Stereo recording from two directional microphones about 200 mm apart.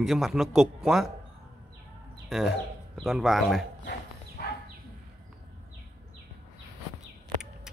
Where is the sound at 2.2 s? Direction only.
Centre (ahead or behind).